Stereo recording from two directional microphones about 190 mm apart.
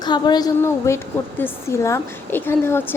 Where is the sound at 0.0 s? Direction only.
20° left (ahead or behind).